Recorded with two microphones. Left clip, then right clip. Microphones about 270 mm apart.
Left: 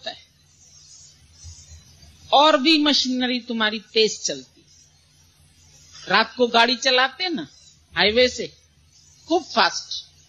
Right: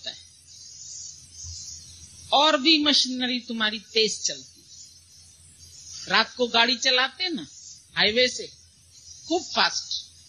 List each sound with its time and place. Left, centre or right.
2.2 s a man's voice: right
6.0 s a man's voice: right